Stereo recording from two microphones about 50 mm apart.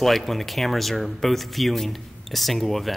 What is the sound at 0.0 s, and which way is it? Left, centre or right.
Speech, centre.